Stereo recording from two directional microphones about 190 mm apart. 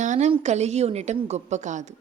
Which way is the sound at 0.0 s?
40° right (ahead or behind).